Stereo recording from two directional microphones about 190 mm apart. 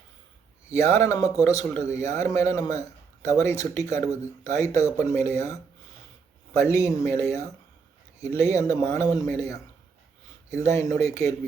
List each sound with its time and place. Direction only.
0.8 s speech: 15° left (ahead or behind)
9.2 s a man's voice: centre (ahead or behind)
10.5 s speech: 15° left (ahead or behind)